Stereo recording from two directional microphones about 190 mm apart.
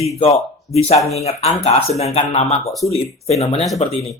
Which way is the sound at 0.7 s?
35° left (ahead or behind).